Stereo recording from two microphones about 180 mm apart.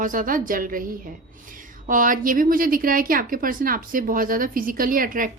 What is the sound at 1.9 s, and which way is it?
A woman's voice, 50° right (ahead or behind).